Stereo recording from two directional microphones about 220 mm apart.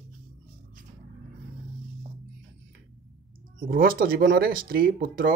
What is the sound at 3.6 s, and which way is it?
Speech, 40° right (ahead or behind).